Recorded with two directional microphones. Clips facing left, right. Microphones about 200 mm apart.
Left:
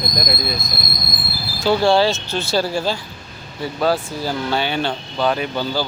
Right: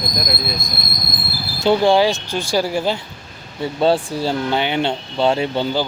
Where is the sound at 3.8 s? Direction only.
25° right (ahead or behind).